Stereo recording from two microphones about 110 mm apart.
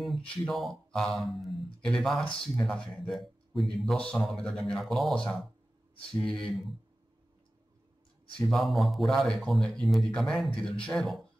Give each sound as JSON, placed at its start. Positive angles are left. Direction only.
{"t": 0.0, "sound": "speech", "side_deg": 0}
{"t": 8.4, "sound": "speech", "side_deg": 0}